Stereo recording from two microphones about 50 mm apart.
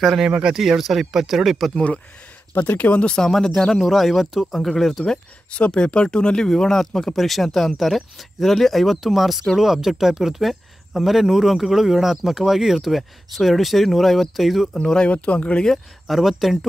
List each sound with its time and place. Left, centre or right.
0.3 s speech: centre
2.7 s speech: left
3.2 s speech: centre
5.0 s speech: centre
15.0 s speech: left
15.7 s speech: centre